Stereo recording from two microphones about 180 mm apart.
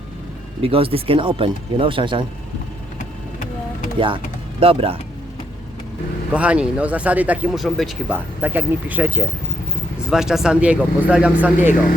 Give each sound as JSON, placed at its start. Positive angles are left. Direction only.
{"t": 0.6, "sound": "speech", "side_deg": -30}
{"t": 3.9, "sound": "speech", "side_deg": -30}
{"t": 6.3, "sound": "speech", "side_deg": -5}